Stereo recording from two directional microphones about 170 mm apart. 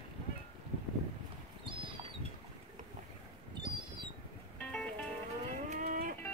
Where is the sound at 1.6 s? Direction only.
30° right (ahead or behind).